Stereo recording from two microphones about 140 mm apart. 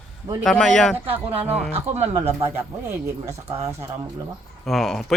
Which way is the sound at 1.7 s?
50° right (ahead or behind).